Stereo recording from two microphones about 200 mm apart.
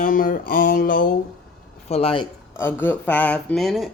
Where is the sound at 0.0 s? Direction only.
45° left (ahead or behind).